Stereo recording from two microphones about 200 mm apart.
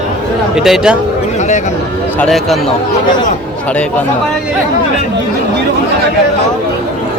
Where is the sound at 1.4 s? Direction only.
35° left (ahead or behind).